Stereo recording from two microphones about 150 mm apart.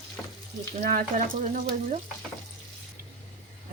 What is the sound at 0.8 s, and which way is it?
Speech, 65° right (ahead or behind).